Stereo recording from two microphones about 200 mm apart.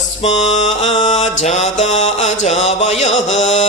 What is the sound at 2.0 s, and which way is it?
Music, 35° left (ahead or behind).